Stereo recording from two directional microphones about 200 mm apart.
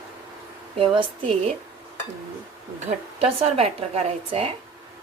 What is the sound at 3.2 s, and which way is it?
A woman's voice, 30° right (ahead or behind).